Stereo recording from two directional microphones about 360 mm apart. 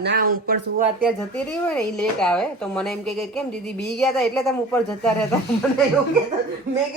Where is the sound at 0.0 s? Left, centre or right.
Right.